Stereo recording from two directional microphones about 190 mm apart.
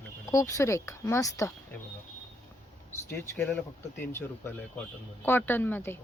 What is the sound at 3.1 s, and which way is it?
Speech, 10° left (ahead or behind).